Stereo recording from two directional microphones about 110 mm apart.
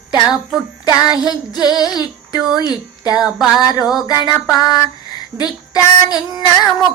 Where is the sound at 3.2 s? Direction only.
Centre (ahead or behind).